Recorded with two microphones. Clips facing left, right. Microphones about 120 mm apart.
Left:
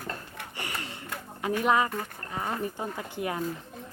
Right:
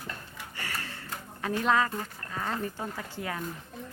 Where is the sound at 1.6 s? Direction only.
15° left (ahead or behind).